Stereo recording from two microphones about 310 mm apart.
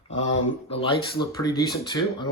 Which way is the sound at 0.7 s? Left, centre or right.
Centre.